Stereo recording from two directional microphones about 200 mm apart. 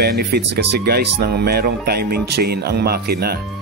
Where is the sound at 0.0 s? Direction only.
50° right (ahead or behind).